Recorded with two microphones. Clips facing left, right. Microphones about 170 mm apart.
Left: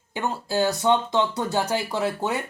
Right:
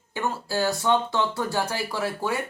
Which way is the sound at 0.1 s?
20° left (ahead or behind).